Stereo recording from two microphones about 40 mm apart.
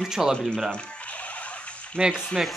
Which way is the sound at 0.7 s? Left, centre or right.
Left.